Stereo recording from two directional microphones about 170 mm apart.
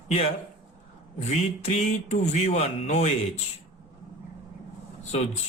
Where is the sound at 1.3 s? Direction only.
45° left (ahead or behind).